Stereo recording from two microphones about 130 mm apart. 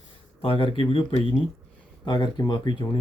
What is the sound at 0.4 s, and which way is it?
Speech, 45° left (ahead or behind).